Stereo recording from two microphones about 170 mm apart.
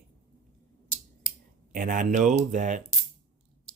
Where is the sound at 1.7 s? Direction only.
50° right (ahead or behind).